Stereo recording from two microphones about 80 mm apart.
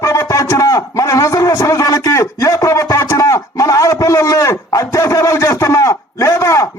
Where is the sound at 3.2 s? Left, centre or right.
Left.